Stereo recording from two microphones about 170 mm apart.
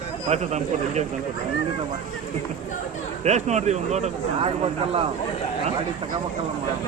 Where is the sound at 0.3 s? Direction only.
40° right (ahead or behind).